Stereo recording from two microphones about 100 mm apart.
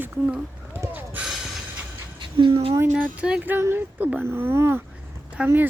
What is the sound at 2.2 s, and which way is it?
Speech, 55° right (ahead or behind).